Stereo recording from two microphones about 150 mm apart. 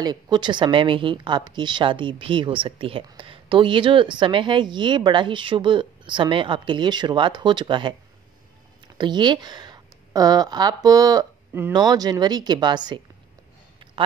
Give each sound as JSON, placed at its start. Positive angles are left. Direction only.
{"t": 0.0, "sound": "a woman's voice", "side_deg": -30}
{"t": 8.9, "sound": "speech", "side_deg": -30}